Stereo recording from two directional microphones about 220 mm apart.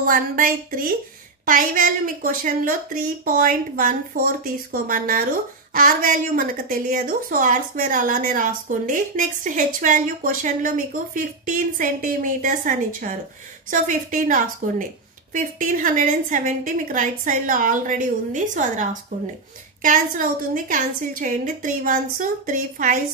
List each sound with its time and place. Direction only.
0.0 s a woman's voice: 40° right (ahead or behind)